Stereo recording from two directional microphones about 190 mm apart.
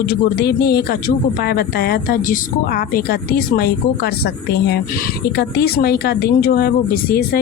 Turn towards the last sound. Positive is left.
turn(degrees=50)  # may be behind; listen again after turning